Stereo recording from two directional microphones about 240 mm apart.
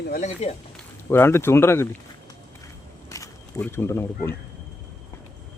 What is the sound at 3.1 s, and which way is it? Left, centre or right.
Speech, centre.